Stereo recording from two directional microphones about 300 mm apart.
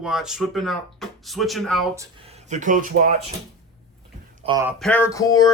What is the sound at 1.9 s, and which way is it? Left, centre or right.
Speech, centre.